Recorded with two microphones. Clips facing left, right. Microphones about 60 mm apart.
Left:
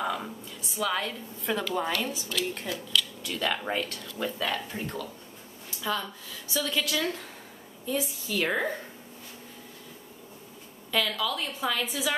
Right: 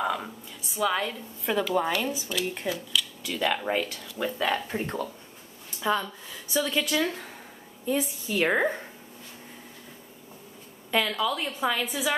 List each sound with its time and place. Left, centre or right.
0.0 s a sound: centre
0.7 s speech: centre
4.6 s speech: right
5.8 s a woman's voice: centre
10.9 s a woman's voice: centre